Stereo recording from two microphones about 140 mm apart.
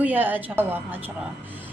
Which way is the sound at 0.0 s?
15° right (ahead or behind).